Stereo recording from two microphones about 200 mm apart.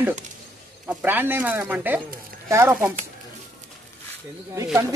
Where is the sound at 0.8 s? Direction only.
10° right (ahead or behind).